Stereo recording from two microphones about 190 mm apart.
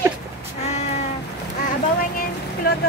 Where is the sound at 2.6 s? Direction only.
50° left (ahead or behind).